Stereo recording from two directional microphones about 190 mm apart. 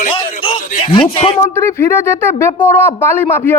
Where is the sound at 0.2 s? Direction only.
25° left (ahead or behind).